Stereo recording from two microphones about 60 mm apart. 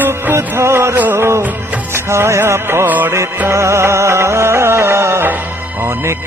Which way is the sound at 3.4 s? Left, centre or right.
Right.